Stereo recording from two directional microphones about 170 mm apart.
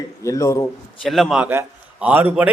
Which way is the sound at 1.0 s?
Centre (ahead or behind).